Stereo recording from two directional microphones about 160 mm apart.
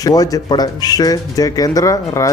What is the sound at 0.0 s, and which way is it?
Speech, 20° left (ahead or behind).